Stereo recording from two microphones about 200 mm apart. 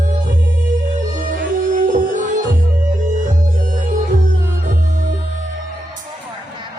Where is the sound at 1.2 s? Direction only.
40° right (ahead or behind).